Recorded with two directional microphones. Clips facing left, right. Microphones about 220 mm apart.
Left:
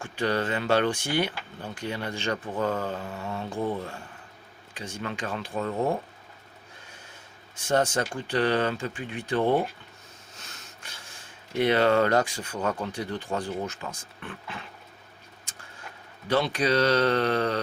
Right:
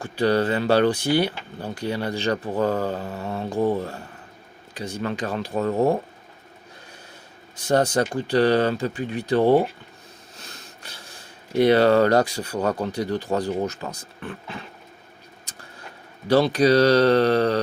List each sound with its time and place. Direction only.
0.0 s speech: 35° right (ahead or behind)
7.5 s speech: 35° right (ahead or behind)
10.3 s a sound: 35° right (ahead or behind)
11.5 s speech: 35° right (ahead or behind)
16.3 s speech: 40° right (ahead or behind)